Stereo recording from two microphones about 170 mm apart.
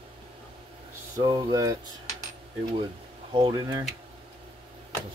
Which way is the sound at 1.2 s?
25° right (ahead or behind).